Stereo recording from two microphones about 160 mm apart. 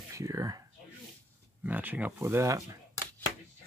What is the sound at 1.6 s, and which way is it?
Speech, 10° right (ahead or behind).